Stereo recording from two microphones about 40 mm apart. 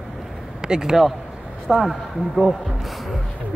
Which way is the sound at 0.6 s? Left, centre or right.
Centre.